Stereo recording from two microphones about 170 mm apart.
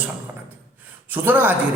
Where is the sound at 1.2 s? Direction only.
10° right (ahead or behind).